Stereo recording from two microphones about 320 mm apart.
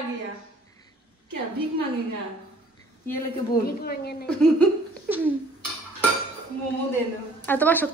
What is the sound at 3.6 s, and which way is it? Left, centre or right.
Speech, left.